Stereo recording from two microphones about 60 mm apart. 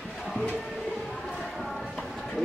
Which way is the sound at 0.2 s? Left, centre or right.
Centre.